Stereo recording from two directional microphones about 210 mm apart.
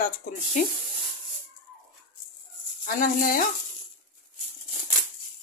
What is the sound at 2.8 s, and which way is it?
Speech, 45° left (ahead or behind).